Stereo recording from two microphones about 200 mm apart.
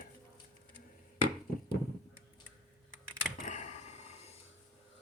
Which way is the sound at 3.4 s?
35° left (ahead or behind).